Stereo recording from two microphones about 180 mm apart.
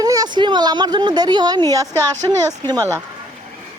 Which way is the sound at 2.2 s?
25° right (ahead or behind).